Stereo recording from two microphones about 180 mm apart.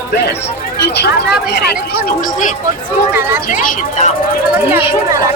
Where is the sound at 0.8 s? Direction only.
65° left (ahead or behind); by 4.0 s 45° left (ahead or behind).